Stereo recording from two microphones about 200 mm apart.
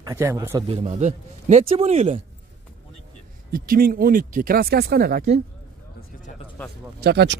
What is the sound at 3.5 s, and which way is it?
Speech, 45° right (ahead or behind).